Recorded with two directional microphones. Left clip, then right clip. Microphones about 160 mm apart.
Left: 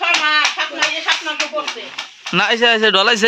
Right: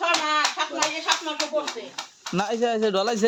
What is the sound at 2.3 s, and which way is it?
Speech, 5° left (ahead or behind).